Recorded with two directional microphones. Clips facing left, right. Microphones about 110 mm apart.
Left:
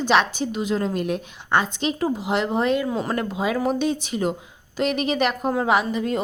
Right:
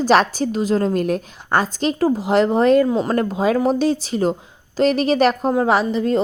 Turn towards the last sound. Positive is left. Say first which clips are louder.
# right 4 dB
turn(degrees=-30)  # may be behind; listen again after turning